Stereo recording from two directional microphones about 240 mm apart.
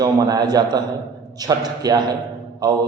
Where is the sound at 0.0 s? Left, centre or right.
Centre.